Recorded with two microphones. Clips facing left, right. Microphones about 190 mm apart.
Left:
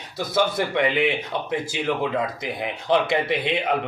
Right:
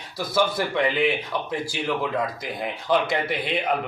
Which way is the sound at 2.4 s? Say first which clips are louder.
Left 1 dB; 20° left (ahead or behind).